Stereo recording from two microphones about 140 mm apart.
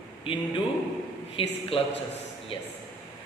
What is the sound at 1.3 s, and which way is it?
Mantra, 40° left (ahead or behind).